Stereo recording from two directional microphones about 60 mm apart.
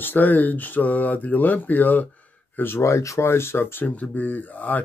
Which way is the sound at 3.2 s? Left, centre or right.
Left.